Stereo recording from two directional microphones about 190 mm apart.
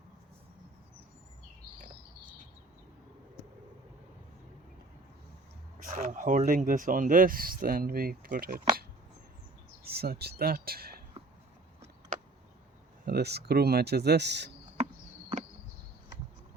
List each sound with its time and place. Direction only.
5.8 s speech: 40° right (ahead or behind)
9.8 s speech: 55° right (ahead or behind)
13.1 s speech: 60° right (ahead or behind)